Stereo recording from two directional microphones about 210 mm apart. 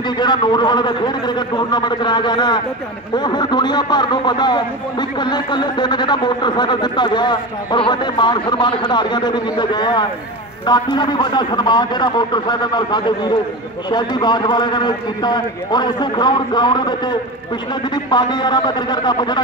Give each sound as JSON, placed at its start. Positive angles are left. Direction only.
{"t": 0.2, "sound": "a man's voice", "side_deg": 20}